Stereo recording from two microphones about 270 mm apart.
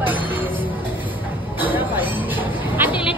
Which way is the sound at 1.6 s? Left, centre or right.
Centre.